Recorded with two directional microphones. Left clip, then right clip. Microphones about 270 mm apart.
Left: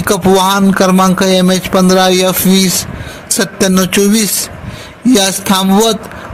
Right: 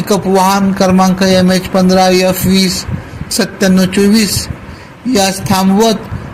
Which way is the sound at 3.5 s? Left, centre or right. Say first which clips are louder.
Left 1 dB; left.